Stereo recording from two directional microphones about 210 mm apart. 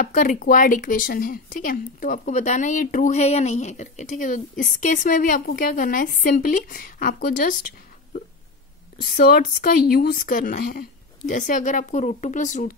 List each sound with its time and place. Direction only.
0.0 s speech: 40° left (ahead or behind)
9.1 s speech: 45° left (ahead or behind)